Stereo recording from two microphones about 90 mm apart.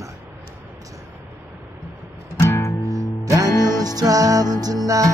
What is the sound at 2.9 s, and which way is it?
Music, 40° right (ahead or behind).